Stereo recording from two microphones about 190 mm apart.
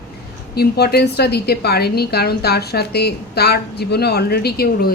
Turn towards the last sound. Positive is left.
turn(degrees=55)  # may be behind; listen again after turning